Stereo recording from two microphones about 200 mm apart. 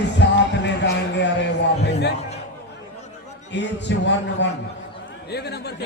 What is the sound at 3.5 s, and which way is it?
Music, 60° left (ahead or behind).